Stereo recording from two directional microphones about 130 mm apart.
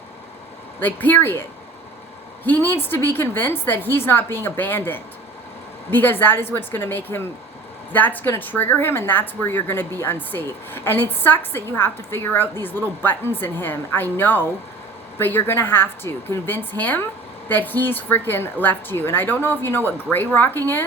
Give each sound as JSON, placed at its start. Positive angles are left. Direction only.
{"t": 0.8, "sound": "speech", "side_deg": 15}